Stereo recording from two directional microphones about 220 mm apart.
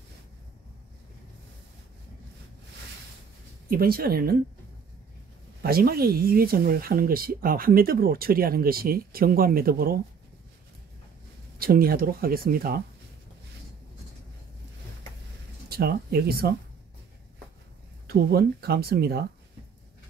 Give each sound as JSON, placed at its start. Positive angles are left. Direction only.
{"t": 3.7, "sound": "speech", "side_deg": -45}
{"t": 5.6, "sound": "speech", "side_deg": -45}
{"t": 11.6, "sound": "speech", "side_deg": -40}
{"t": 15.7, "sound": "speech", "side_deg": -45}
{"t": 18.0, "sound": "speech", "side_deg": -45}